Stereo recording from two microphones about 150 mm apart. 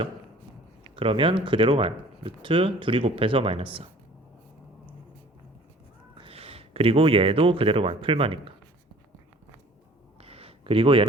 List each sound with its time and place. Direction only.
0.9 s speech: 35° right (ahead or behind)
6.1 s speech: 40° right (ahead or behind)
10.2 s a sound: 40° right (ahead or behind)